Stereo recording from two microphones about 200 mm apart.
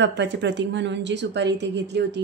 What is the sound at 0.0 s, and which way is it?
A woman's voice, 60° right (ahead or behind).